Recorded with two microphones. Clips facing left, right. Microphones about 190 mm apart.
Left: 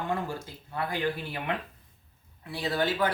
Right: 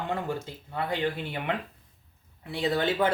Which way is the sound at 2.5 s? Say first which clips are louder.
Right 2 dB; 25° right (ahead or behind).